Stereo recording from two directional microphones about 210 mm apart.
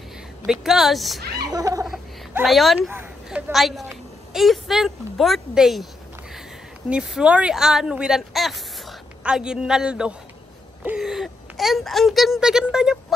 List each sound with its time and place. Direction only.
0.5 s speech: centre (ahead or behind)
1.5 s giggle: 15° right (ahead or behind)
1.9 s speech: centre (ahead or behind)
6.9 s speech: 5° right (ahead or behind)